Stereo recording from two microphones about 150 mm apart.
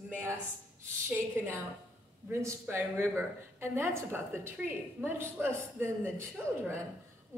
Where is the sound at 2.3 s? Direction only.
20° right (ahead or behind).